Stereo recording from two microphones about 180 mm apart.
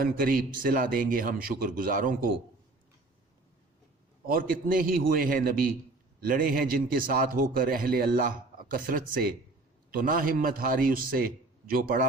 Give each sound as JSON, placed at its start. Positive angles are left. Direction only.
{"t": 0.0, "sound": "a man's voice", "side_deg": -50}
{"t": 4.3, "sound": "a man's voice", "side_deg": -50}